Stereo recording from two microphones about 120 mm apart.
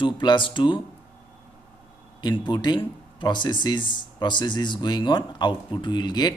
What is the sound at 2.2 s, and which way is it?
Speech, 35° left (ahead or behind).